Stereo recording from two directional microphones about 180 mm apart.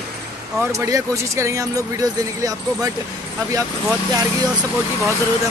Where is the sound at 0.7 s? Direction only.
15° right (ahead or behind).